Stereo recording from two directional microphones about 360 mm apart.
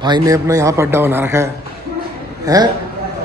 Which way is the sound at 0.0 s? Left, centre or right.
Centre.